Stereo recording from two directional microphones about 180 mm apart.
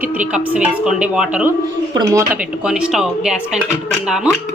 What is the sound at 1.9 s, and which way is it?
Speech, 20° right (ahead or behind).